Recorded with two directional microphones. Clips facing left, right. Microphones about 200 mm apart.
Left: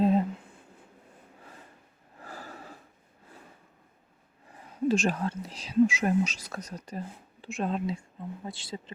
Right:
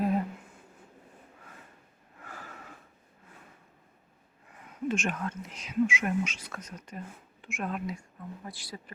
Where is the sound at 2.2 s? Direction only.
35° left (ahead or behind).